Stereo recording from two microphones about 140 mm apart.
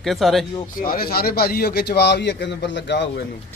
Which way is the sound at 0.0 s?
Centre (ahead or behind).